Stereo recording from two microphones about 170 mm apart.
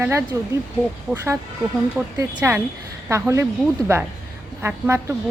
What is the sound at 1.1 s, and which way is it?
A woman's voice, 15° right (ahead or behind).